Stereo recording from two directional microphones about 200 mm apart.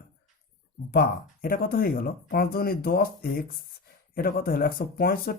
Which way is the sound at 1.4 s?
45° left (ahead or behind).